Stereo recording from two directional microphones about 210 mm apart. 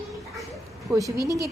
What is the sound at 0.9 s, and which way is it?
Speech, 15° right (ahead or behind).